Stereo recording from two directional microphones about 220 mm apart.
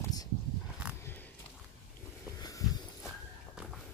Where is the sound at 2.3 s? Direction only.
15° left (ahead or behind).